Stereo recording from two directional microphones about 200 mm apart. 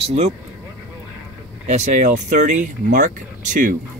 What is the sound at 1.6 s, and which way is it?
Speech, 35° right (ahead or behind).